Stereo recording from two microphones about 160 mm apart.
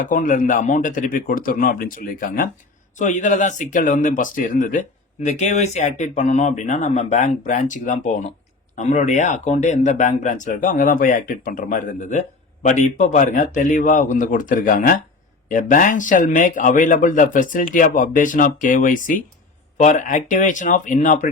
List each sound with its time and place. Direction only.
0.0 s a man's voice: 55° left (ahead or behind)